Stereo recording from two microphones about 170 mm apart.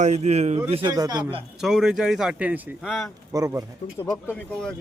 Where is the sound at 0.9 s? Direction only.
25° right (ahead or behind).